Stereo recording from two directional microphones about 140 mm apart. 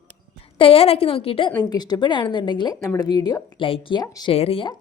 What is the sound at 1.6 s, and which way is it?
A woman's voice, 30° left (ahead or behind).